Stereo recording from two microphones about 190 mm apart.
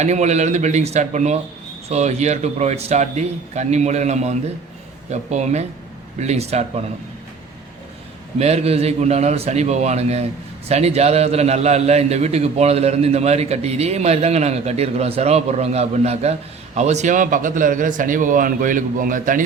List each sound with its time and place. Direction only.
0.0 s a man's voice: 35° right (ahead or behind)
8.4 s a man's voice: 35° right (ahead or behind)